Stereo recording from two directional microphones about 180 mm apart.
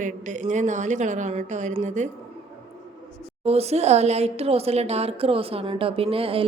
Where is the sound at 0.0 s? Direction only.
45° right (ahead or behind).